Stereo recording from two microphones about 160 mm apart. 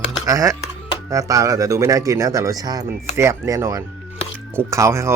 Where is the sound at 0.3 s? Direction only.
20° right (ahead or behind).